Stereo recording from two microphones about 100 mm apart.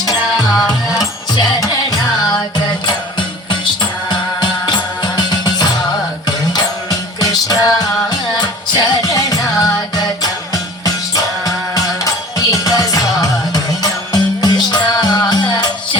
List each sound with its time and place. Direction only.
0.0 s music: 40° left (ahead or behind)
2.8 s music: 50° left (ahead or behind)
7.2 s music: 40° left (ahead or behind)